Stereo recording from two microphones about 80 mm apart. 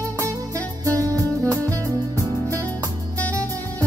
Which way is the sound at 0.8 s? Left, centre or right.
Right.